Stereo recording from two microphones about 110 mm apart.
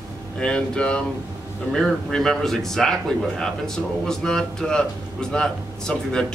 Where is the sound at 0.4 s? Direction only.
10° left (ahead or behind).